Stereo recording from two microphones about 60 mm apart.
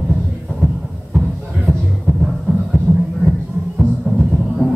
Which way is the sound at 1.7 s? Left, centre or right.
Centre.